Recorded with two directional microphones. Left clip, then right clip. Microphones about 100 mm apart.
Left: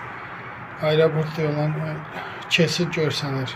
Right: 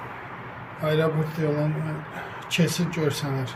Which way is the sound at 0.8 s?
5° right (ahead or behind).